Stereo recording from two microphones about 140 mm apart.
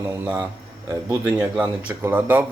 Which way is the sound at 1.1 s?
15° right (ahead or behind).